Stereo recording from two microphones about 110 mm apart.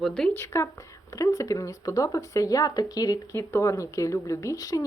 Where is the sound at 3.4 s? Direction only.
25° left (ahead or behind).